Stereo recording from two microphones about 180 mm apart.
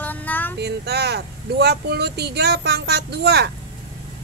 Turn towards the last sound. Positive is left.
turn(degrees=-65)  # may be behind; listen again after turning